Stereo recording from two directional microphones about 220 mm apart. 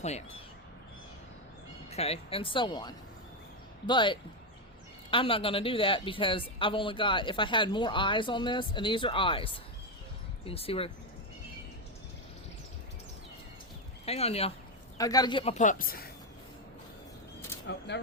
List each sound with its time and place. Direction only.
1.9 s speech: 30° left (ahead or behind)
14.0 s speech: 25° left (ahead or behind)
14.9 s speech: 15° left (ahead or behind); by 16.0 s 40° left (ahead or behind)
17.7 s speech: 50° left (ahead or behind)